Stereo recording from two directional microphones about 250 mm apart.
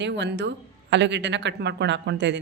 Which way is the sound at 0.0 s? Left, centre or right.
Right.